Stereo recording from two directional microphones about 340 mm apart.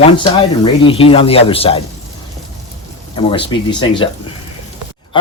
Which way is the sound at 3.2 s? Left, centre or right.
Centre.